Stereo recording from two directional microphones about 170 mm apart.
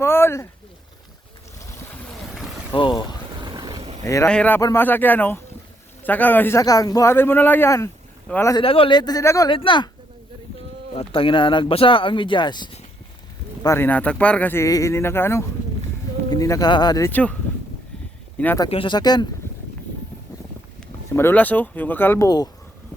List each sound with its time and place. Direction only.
0.0 s speech: 15° left (ahead or behind)
2.7 s speech: 25° left (ahead or behind)
3.4 s vehicle: 25° right (ahead or behind)
4.0 s a man's voice: 15° left (ahead or behind)
8.5 s speech: 35° left (ahead or behind)
9.5 s speech: 30° left (ahead or behind)
10.9 s speech: 30° left (ahead or behind)
13.6 s a man's voice: 15° left (ahead or behind)
17.1 s a man's voice: 10° left (ahead or behind)
18.3 s speech: 10° left (ahead or behind)
18.7 s speech: 30° left (ahead or behind)
21.1 s a man's voice: 15° left (ahead or behind)